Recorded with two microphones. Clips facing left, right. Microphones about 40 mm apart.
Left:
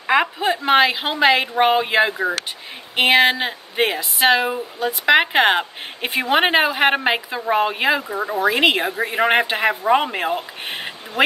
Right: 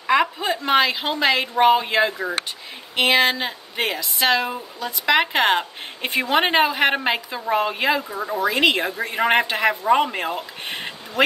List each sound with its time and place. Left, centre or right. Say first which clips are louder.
0.0 s a woman's voice: left 1 dB; centre
8.2 s speech: left 2 dB; left
8.5 s a woman's voice: left 2 dB; left